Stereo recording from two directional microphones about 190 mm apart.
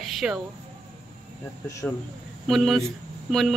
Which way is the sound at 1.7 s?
15° left (ahead or behind).